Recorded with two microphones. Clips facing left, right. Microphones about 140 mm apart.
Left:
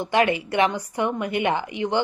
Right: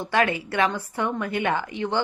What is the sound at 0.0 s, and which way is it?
A woman's voice, 20° left (ahead or behind).